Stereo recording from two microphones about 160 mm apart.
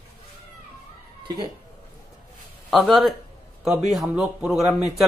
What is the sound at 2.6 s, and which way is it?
A man's voice, centre (ahead or behind).